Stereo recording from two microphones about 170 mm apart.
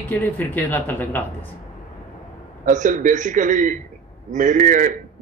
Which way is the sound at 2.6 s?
50° right (ahead or behind).